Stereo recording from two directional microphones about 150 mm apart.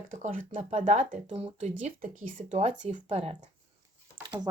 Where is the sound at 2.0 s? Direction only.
60° right (ahead or behind); by 3.4 s 40° right (ahead or behind).